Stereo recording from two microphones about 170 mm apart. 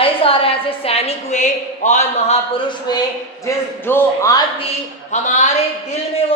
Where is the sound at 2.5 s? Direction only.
25° left (ahead or behind).